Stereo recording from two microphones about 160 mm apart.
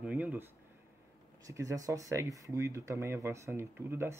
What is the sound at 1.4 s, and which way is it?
Speech, 20° right (ahead or behind).